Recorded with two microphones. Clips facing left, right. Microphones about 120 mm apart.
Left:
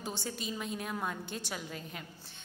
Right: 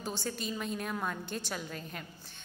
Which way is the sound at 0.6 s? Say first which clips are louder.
Right 1 dB; 15° left (ahead or behind).